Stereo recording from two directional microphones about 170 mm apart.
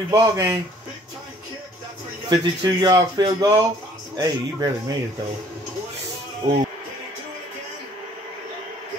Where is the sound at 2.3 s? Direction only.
25° right (ahead or behind).